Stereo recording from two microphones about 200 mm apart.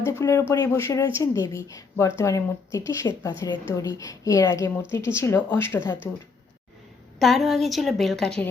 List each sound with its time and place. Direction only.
0.0 s a woman's voice: 15° left (ahead or behind)
7.2 s a woman's voice: centre (ahead or behind)